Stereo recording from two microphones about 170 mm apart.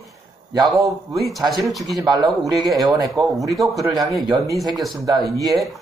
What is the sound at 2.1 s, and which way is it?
Speech, 20° right (ahead or behind).